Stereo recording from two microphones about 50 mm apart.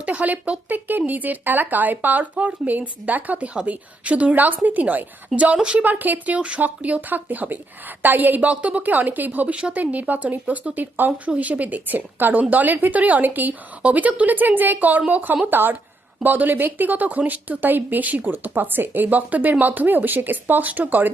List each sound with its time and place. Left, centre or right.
0.0 s speech: right
5.8 s a woman's voice: right